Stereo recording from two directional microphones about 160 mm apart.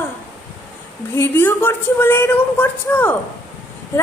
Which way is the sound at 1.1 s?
15° left (ahead or behind).